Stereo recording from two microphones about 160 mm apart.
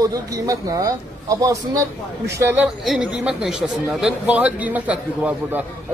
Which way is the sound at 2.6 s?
Centre (ahead or behind).